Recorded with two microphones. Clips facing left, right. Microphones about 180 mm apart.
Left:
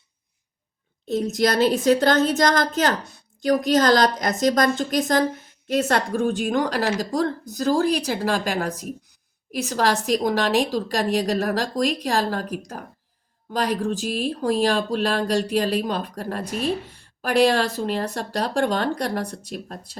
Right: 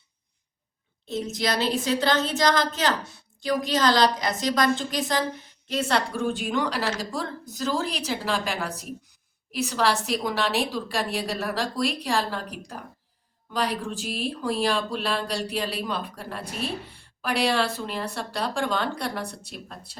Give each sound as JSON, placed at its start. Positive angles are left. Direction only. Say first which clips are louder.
{"t": 1.0, "sound": "a woman's voice", "louder": "left 6 dB", "side_deg": 45}